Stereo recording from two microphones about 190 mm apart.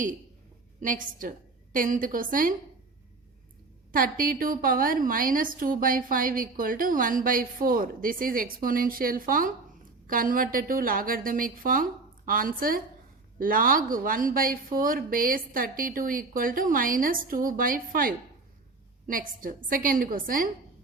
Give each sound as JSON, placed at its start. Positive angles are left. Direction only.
{"t": 0.8, "sound": "a woman's voice", "side_deg": -45}
{"t": 3.9, "sound": "a woman's voice", "side_deg": -50}